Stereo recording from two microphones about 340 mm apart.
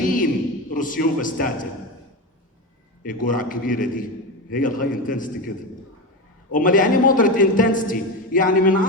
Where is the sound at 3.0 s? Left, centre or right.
Left.